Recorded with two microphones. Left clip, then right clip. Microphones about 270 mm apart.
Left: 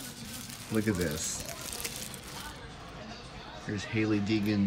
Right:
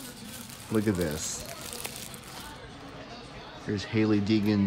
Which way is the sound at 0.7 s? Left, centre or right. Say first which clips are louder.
Right 3 dB; centre.